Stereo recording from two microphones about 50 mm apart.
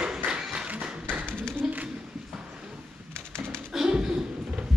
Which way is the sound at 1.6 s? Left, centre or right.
Centre.